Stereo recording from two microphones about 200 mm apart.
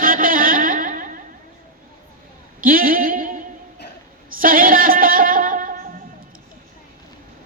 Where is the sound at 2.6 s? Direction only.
45° right (ahead or behind).